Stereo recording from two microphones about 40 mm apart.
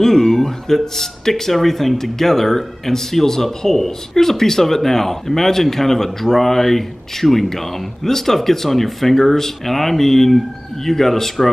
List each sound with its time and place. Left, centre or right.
0.0 s speech: centre